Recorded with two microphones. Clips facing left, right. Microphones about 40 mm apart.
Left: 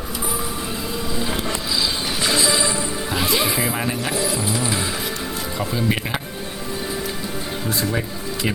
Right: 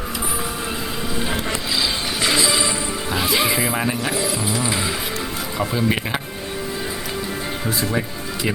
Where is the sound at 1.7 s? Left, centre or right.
Centre.